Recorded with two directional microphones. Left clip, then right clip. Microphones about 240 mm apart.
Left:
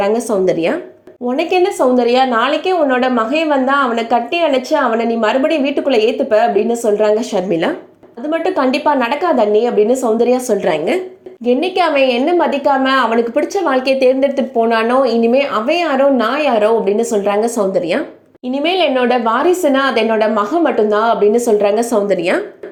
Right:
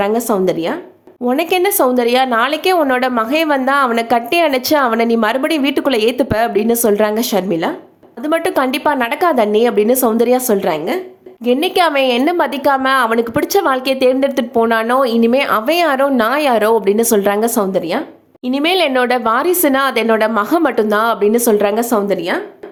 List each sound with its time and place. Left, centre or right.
0.0 s a woman's voice: centre